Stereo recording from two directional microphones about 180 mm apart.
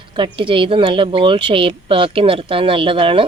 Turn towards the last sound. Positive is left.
turn(degrees=-30)  # may be behind; listen again after turning